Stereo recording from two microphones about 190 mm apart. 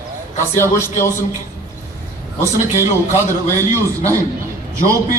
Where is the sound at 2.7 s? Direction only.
15° right (ahead or behind).